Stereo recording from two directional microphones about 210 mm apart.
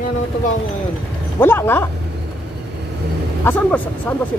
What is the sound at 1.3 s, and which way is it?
Speech, 10° left (ahead or behind).